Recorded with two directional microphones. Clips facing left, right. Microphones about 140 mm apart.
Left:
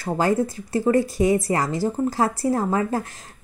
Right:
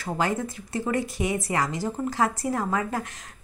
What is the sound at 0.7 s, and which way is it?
A woman's voice, 35° left (ahead or behind).